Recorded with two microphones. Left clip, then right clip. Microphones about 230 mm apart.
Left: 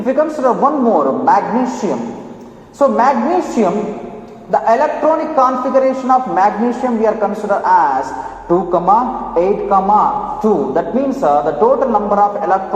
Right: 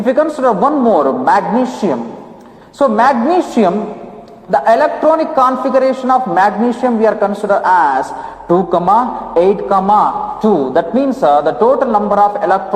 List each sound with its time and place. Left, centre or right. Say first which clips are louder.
0.0 s a man's voice: right 2 dB; right